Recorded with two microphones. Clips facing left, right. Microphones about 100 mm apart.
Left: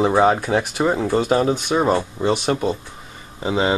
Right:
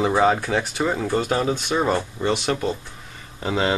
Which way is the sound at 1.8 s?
25° left (ahead or behind).